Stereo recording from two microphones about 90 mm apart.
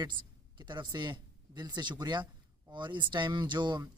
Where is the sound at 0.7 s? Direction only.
55° right (ahead or behind).